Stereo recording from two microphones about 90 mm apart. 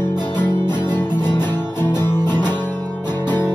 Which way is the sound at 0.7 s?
25° left (ahead or behind).